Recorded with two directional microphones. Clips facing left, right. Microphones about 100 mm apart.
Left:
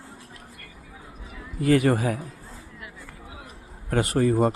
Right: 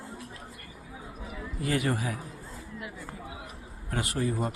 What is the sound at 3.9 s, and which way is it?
Speech, 60° left (ahead or behind).